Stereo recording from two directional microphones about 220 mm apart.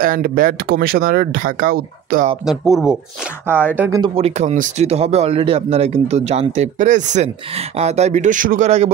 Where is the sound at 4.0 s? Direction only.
30° right (ahead or behind).